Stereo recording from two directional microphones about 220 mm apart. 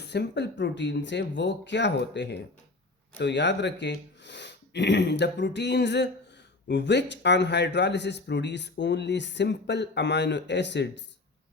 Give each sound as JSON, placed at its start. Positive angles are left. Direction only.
{"t": 0.0, "sound": "a man's voice", "side_deg": 50}